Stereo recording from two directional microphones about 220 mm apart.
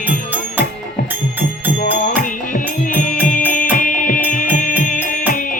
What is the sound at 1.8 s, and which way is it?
Music, 40° left (ahead or behind).